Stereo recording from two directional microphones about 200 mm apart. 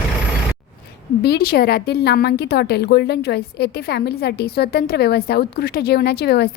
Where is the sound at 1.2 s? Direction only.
50° left (ahead or behind).